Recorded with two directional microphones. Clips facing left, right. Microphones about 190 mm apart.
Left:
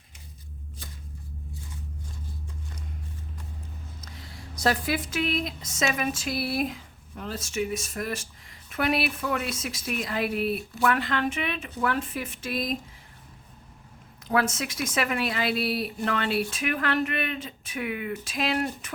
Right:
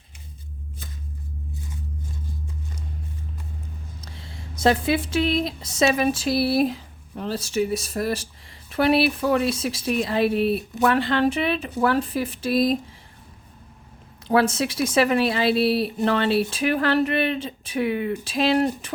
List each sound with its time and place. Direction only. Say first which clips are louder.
4.0 s speech: right 3 dB; 30° right (ahead or behind)
14.3 s speech: right 6 dB; 30° right (ahead or behind)